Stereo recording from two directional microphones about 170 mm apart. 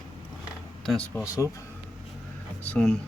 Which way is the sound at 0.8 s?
5° left (ahead or behind).